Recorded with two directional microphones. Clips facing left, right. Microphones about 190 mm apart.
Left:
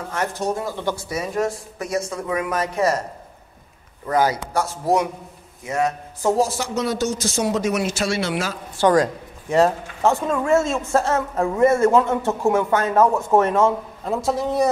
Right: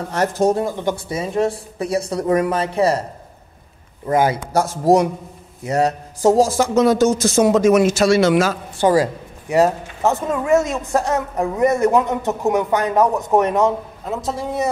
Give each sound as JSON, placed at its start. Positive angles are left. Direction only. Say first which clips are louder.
{"t": 0.4, "sound": "speech", "louder": "right 10 dB", "side_deg": -45}
{"t": 0.7, "sound": "speech", "louder": "right 3 dB", "side_deg": -20}
{"t": 4.1, "sound": "speech", "louder": "right 3 dB", "side_deg": -25}
{"t": 4.6, "sound": "speech", "louder": "right 6 dB", "side_deg": -40}
{"t": 6.6, "sound": "speech", "louder": "right 9 dB", "side_deg": -50}
{"t": 8.7, "sound": "speech", "louder": "even", "side_deg": -5}
{"t": 14.0, "sound": "a man's voice", "louder": "left 3 dB", "side_deg": 0}